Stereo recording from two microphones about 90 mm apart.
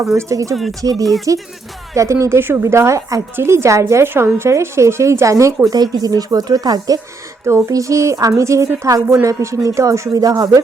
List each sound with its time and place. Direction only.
0.0 s a woman's voice: 35° right (ahead or behind)
0.5 s speech: centre (ahead or behind)
0.8 s a woman's voice: 40° right (ahead or behind)
1.0 s speech: centre (ahead or behind)
2.0 s a woman's voice: 35° right (ahead or behind)
5.6 s speech: 45° right (ahead or behind)
7.4 s a woman's voice: 35° right (ahead or behind)